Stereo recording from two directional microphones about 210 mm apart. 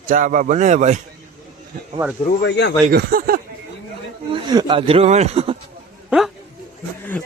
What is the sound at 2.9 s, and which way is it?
Speech, 45° right (ahead or behind).